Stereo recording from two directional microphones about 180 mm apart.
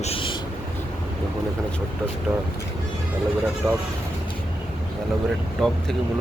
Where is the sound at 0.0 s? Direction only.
30° left (ahead or behind).